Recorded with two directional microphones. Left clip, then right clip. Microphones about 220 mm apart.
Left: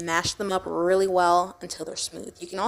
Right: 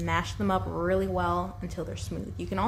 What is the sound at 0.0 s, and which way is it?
Speech, 45° left (ahead or behind).